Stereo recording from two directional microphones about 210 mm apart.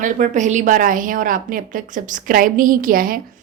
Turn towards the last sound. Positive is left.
turn(degrees=-40)  # may be behind; listen again after turning